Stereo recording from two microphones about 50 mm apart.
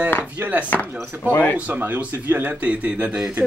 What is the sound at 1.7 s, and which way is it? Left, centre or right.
Speech, right.